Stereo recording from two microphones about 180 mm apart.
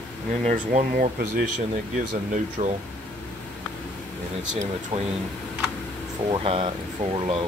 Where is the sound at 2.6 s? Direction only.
40° right (ahead or behind).